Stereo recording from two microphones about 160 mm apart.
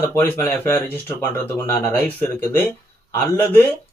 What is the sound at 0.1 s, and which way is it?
Speech, 15° left (ahead or behind).